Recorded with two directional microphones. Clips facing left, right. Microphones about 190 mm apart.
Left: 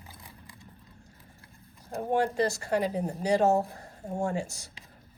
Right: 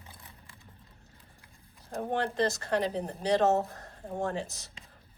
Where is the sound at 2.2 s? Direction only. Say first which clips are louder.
Left 2 dB; 10° left (ahead or behind).